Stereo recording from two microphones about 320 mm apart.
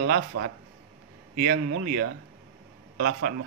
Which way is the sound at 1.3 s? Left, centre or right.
Right.